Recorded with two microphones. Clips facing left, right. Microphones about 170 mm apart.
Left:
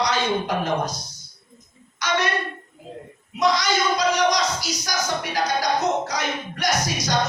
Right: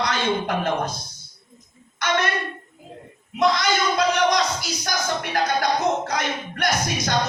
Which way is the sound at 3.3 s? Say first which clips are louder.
Right 1 dB; 55° right (ahead or behind).